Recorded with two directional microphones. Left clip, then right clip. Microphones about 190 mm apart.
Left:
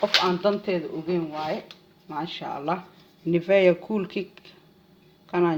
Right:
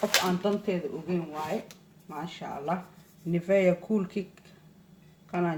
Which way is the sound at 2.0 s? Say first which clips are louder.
Left 6 dB; 45° left (ahead or behind).